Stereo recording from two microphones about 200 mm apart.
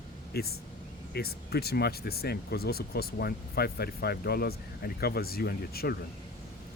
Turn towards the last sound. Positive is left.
turn(degrees=50)  # may be behind; listen again after turning